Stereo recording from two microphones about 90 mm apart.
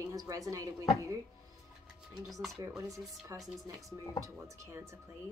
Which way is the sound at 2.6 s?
45° right (ahead or behind).